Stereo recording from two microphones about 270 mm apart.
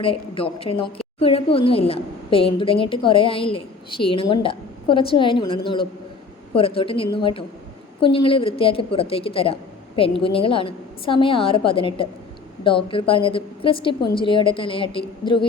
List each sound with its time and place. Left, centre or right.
0.0 s a woman's voice: centre